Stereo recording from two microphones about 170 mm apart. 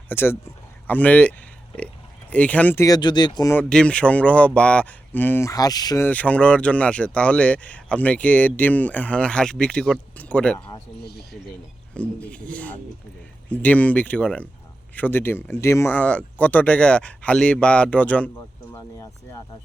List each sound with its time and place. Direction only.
0.1 s speech: 15° left (ahead or behind)
3.5 s speech: 5° left (ahead or behind); by 6.1 s 20° left (ahead or behind)
6.1 s speech: 10° left (ahead or behind)
11.0 s speech: 70° left (ahead or behind)
11.9 s speech: 5° left (ahead or behind)